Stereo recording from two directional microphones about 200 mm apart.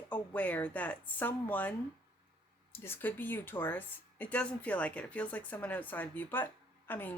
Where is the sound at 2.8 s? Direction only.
10° left (ahead or behind).